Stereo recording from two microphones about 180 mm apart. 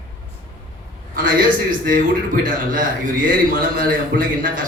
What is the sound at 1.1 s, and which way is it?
A man's voice, 50° right (ahead or behind).